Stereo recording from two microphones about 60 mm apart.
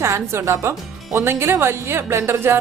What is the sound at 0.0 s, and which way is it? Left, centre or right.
A woman's voice, right.